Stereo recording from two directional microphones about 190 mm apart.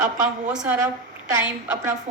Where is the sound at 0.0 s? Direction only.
40° right (ahead or behind).